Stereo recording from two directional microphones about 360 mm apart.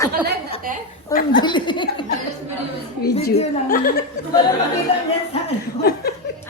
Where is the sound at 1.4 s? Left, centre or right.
Centre.